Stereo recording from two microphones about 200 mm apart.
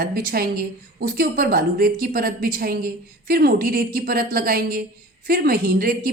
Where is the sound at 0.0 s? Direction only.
45° right (ahead or behind).